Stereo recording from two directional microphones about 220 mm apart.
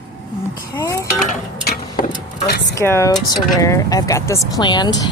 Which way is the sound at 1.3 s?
40° left (ahead or behind).